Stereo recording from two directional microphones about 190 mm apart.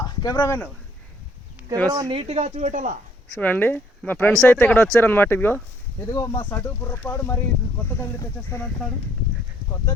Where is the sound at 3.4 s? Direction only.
10° left (ahead or behind).